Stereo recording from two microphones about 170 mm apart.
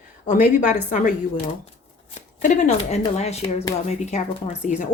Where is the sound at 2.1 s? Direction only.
45° left (ahead or behind).